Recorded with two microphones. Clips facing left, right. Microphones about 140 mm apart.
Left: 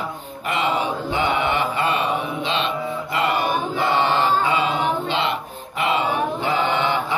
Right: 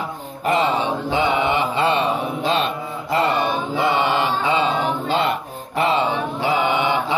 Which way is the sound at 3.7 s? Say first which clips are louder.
Right 2 dB; 15° right (ahead or behind).